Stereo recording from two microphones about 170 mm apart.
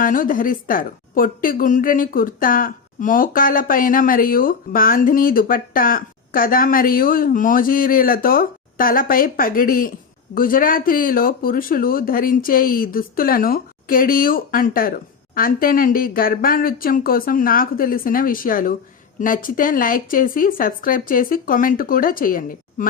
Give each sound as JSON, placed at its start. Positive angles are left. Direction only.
{"t": 0.0, "sound": "a woman's voice", "side_deg": 55}